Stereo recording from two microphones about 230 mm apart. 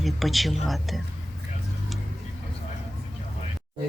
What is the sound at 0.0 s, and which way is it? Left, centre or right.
Speech, centre.